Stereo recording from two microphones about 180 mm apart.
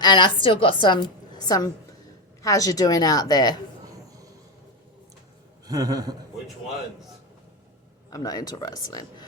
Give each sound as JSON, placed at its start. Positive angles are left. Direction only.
{"t": 0.0, "sound": "a woman's voice", "side_deg": 25}
{"t": 5.6, "sound": "a man's voice", "side_deg": -20}
{"t": 8.1, "sound": "speech", "side_deg": 20}